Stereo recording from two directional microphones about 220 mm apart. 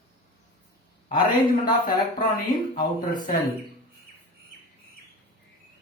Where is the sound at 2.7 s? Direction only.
40° left (ahead or behind).